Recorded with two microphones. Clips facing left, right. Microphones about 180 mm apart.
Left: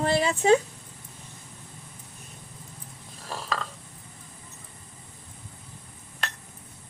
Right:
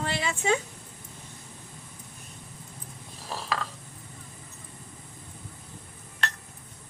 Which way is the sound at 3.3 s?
Centre (ahead or behind).